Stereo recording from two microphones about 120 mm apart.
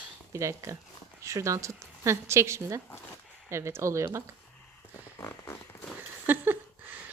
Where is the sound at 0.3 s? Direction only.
25° right (ahead or behind).